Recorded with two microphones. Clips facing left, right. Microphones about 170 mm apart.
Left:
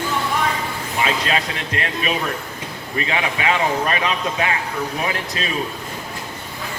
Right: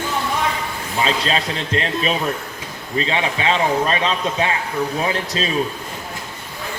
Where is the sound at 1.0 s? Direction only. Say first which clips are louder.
Right 1 dB; 30° right (ahead or behind).